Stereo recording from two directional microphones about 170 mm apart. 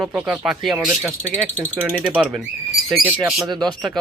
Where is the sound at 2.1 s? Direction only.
5° right (ahead or behind).